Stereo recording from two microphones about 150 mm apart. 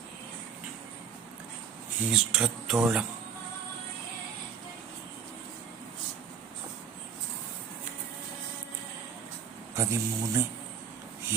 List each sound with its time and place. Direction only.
2.0 s speech: 5° right (ahead or behind)
9.7 s a man's voice: 20° right (ahead or behind)